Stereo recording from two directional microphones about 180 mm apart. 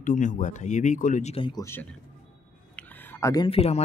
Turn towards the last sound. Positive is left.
turn(degrees=35)  # may be behind; listen again after turning